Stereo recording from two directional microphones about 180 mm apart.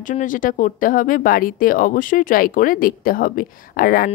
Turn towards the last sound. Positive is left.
turn(degrees=55)  # may be behind; listen again after turning